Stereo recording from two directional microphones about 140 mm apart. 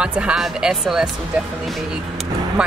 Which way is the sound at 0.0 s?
5° right (ahead or behind).